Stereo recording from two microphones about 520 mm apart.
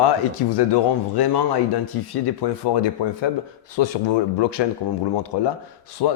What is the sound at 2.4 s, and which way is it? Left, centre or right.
Speech, left.